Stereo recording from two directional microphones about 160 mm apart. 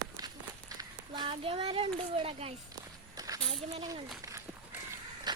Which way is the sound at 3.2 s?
25° right (ahead or behind).